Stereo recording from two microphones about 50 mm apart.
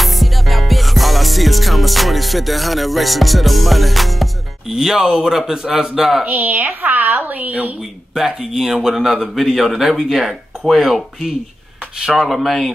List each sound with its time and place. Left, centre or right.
0.0 s music: centre
5.5 s a man's voice: centre
6.2 s a woman's voice: right
8.4 s a man's voice: centre
12.3 s speech: centre